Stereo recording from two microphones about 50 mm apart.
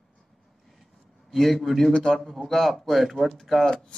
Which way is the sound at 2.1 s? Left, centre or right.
Centre.